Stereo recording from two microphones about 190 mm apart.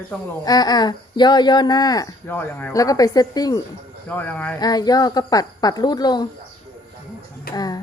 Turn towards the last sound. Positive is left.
turn(degrees=20)  # may be behind; listen again after turning